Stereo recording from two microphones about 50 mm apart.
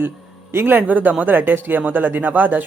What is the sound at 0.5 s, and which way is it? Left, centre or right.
Speech, right.